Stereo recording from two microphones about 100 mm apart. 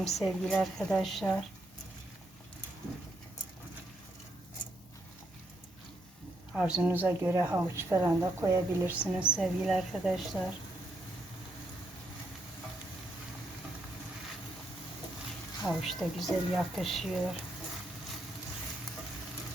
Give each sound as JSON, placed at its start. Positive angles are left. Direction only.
{"t": 0.0, "sound": "speech", "side_deg": 0}
{"t": 6.5, "sound": "a woman's voice", "side_deg": -10}
{"t": 6.8, "sound": "speech", "side_deg": -20}
{"t": 9.0, "sound": "a woman's voice", "side_deg": -10}
{"t": 15.6, "sound": "speech", "side_deg": 0}